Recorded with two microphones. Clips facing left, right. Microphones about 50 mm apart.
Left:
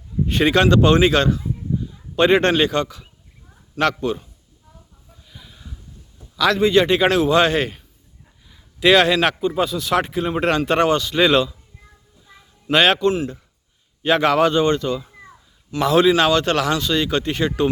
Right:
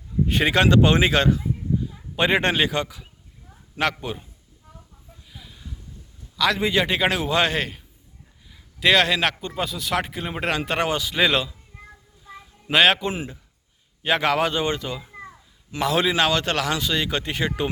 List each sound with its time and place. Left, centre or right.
0.3 s speech: centre
5.3 s a sound: centre
6.3 s a man's voice: centre
12.3 s a sound: centre
13.0 s speech: centre
14.0 s speech: centre